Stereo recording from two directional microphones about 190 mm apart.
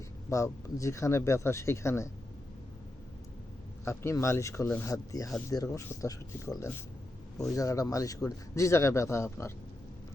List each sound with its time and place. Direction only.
0.3 s speech: 15° left (ahead or behind)
3.8 s speech: 15° left (ahead or behind)